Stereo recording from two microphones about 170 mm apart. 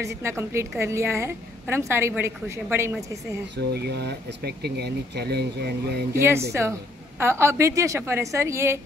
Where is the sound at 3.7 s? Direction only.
75° right (ahead or behind).